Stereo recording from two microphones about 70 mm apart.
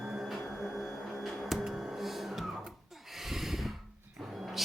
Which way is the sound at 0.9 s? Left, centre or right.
Centre.